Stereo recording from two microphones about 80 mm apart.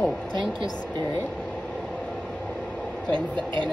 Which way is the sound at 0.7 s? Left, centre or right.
Centre.